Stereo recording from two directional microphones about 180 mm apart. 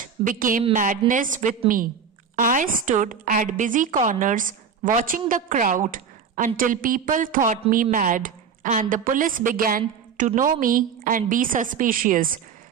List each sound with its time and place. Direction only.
0.3 s a woman's voice: 50° right (ahead or behind)